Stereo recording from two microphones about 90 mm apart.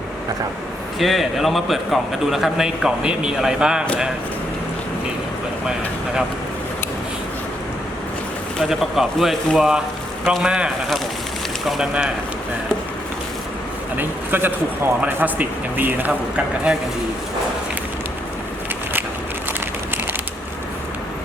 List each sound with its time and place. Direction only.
0.9 s a man's voice: centre (ahead or behind)
8.6 s a man's voice: 5° right (ahead or behind)
13.9 s a man's voice: 20° right (ahead or behind)
16.7 s speech: 10° right (ahead or behind)